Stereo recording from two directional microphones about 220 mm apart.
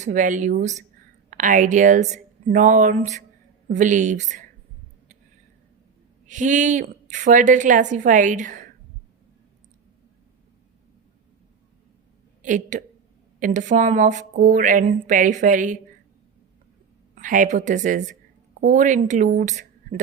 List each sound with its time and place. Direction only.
0.0 s a woman's voice: 35° right (ahead or behind)
6.2 s a woman's voice: 35° right (ahead or behind)
12.4 s a woman's voice: 35° right (ahead or behind)
14.8 s speech: 25° right (ahead or behind)
15.1 s a woman's voice: 35° right (ahead or behind)
17.2 s a woman's voice: 35° right (ahead or behind)